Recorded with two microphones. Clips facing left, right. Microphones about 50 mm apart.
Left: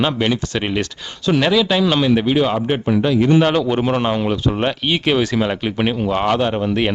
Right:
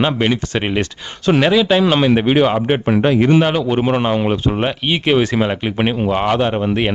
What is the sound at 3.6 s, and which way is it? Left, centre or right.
A man's voice, centre.